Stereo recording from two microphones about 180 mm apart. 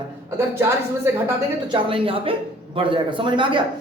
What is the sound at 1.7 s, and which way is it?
A man's voice, 30° right (ahead or behind).